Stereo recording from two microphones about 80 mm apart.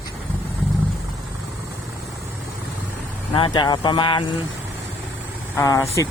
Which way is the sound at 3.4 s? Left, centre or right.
Left.